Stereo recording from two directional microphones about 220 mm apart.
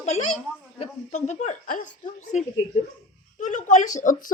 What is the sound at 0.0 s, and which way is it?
A woman's voice, 30° left (ahead or behind).